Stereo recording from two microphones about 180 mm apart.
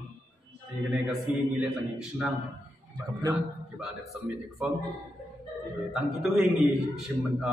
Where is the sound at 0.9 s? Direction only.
5° right (ahead or behind).